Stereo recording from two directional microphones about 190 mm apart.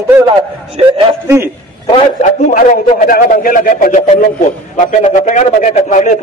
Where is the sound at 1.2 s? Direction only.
15° right (ahead or behind).